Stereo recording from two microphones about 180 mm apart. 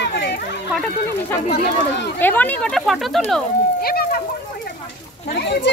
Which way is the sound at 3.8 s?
60° left (ahead or behind).